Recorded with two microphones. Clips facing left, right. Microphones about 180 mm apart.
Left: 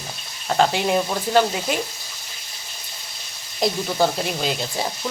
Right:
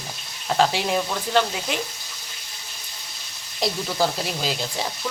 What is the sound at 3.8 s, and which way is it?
Speech, 20° left (ahead or behind).